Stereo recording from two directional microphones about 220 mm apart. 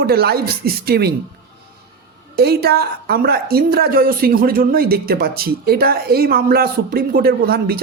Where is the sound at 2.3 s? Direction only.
45° right (ahead or behind).